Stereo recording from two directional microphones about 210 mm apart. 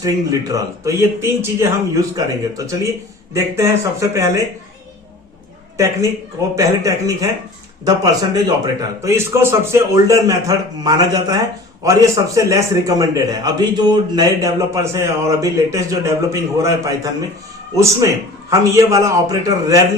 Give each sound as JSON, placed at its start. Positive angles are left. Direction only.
{"t": 0.0, "sound": "a man's voice", "side_deg": -15}
{"t": 5.7, "sound": "a woman's voice", "side_deg": -15}